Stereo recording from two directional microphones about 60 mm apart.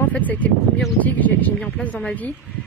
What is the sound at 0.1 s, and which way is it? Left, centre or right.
Speech, left.